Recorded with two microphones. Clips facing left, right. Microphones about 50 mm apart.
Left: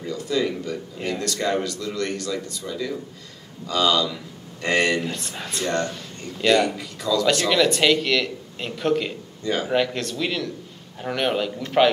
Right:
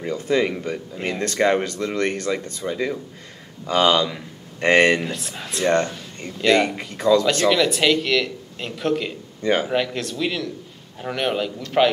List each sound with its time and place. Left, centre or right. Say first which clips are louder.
0.0 s speech: right 3 dB; right
5.0 s speech: right 1 dB; centre
6.6 s speech: right 3 dB; right
7.4 s speech: right 1 dB; centre
9.4 s speech: right 5 dB; right
9.7 s speech: left 1 dB; centre